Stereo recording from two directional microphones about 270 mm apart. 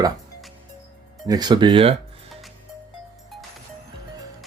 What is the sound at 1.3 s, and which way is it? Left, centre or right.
Speech, centre.